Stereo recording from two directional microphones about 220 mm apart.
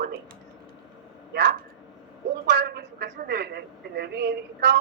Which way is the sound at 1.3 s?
50° right (ahead or behind).